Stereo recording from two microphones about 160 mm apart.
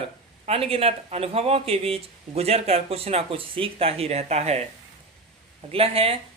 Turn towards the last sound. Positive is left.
turn(degrees=-35)  # may be behind; listen again after turning